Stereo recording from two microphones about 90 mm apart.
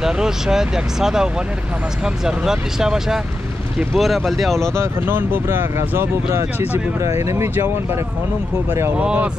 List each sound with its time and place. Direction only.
0.0 s speech: 5° right (ahead or behind)
4.7 s speech: 25° right (ahead or behind)
8.9 s speech: 10° right (ahead or behind)